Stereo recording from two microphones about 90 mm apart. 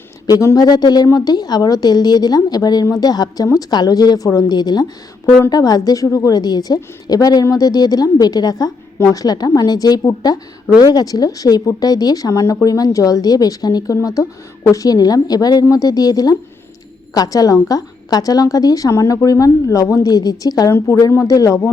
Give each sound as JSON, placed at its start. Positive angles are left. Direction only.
{"t": 0.3, "sound": "a woman's voice", "side_deg": 45}